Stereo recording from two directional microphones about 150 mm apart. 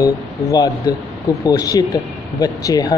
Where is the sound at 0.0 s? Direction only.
25° left (ahead or behind).